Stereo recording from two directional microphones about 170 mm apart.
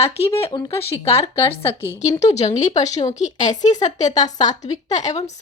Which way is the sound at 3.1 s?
45° left (ahead or behind).